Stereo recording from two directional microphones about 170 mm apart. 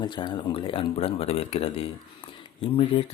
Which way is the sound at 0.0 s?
25° left (ahead or behind).